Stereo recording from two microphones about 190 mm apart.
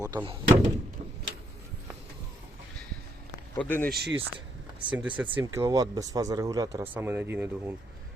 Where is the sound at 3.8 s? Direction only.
55° right (ahead or behind).